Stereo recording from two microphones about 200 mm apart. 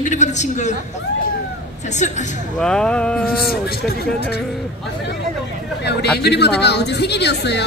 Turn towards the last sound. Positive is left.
turn(degrees=60)  # may be behind; listen again after turning